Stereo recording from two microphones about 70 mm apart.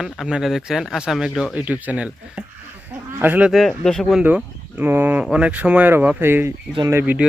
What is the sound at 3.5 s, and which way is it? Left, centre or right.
Speech, centre.